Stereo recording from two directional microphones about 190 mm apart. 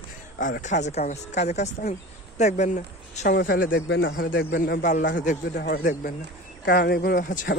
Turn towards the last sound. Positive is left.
turn(degrees=45)  # may be behind; listen again after turning